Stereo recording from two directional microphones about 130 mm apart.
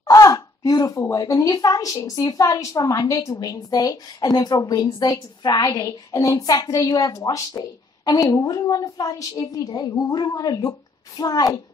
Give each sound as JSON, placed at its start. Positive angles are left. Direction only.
{"t": 0.0, "sound": "speech", "side_deg": 25}